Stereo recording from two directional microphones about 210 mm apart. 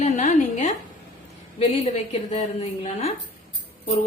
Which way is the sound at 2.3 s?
30° left (ahead or behind).